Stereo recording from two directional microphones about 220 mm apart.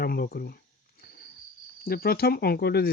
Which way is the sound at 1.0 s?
45° left (ahead or behind).